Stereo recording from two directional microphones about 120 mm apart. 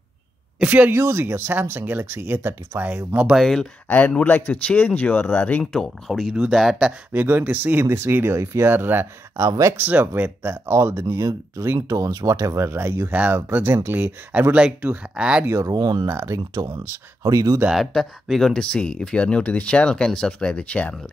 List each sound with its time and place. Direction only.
0.6 s speech: 15° right (ahead or behind)
3.9 s speech: 15° left (ahead or behind)
5.6 s speech: 5° left (ahead or behind)
7.1 s speech: 15° right (ahead or behind)
15.4 s speech: 25° right (ahead or behind)
15.7 s speech: 35° right (ahead or behind)
16.1 s speech: 25° right (ahead or behind)
17.6 s speech: centre (ahead or behind)